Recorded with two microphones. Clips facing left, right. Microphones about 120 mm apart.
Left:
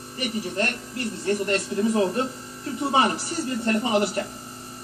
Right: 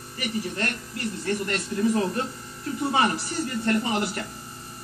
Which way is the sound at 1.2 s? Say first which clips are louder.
Left 5 dB; 30° left (ahead or behind).